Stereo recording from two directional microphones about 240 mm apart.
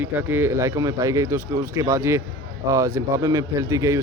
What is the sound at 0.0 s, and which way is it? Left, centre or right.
Speech, centre.